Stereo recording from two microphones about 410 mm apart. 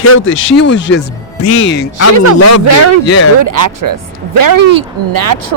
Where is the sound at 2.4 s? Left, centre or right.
Left.